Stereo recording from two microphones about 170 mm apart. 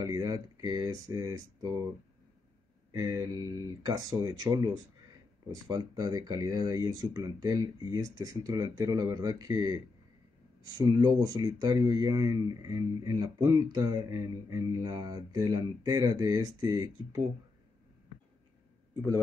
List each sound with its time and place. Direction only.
0.0 s speech: 20° right (ahead or behind)
2.9 s speech: 25° right (ahead or behind)